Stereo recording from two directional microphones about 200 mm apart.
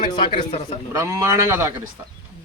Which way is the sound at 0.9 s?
15° right (ahead or behind).